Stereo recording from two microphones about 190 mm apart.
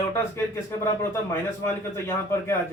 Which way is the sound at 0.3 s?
15° left (ahead or behind).